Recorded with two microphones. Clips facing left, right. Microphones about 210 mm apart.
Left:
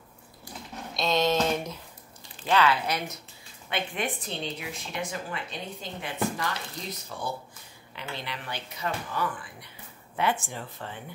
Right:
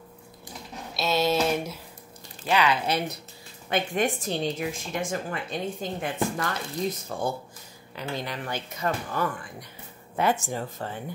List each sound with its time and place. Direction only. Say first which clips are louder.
0.9 s a sound: right 1 dB; 5° right (ahead or behind)
2.4 s speech: even; 15° right (ahead or behind)
2.9 s speech: right 4 dB; 30° right (ahead or behind)
3.6 s a woman's voice: right 6 dB; 45° right (ahead or behind)